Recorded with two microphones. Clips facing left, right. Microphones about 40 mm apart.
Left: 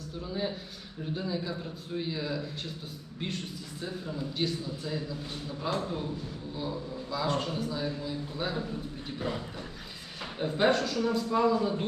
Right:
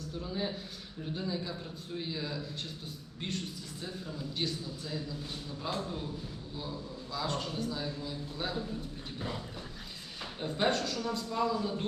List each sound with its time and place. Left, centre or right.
0.1 s a man's voice: centre
7.6 s speech: centre
7.9 s a man's voice: centre
9.1 s a sound: centre
10.3 s a man's voice: centre